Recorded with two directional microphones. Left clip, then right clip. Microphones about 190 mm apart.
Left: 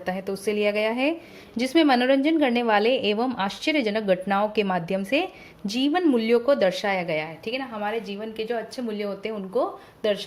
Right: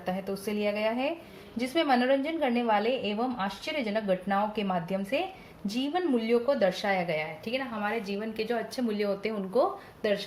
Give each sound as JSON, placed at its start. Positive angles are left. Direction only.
{"t": 0.0, "sound": "a woman's voice", "side_deg": 40}
{"t": 7.8, "sound": "a woman's voice", "side_deg": 25}